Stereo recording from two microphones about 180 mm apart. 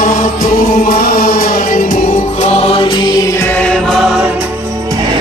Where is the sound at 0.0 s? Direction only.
50° left (ahead or behind); by 4.3 s centre (ahead or behind).